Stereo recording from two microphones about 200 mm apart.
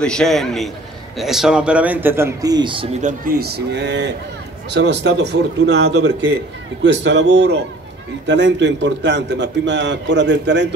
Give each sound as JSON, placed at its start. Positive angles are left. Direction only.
{"t": 0.0, "sound": "a man's voice", "side_deg": 0}